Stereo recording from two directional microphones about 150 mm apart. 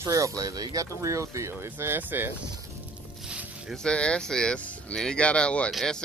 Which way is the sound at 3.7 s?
5° left (ahead or behind).